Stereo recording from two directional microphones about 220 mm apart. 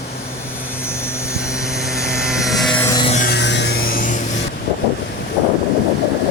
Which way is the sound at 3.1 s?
35° left (ahead or behind).